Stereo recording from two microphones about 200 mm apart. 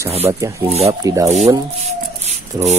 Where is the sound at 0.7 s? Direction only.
30° right (ahead or behind).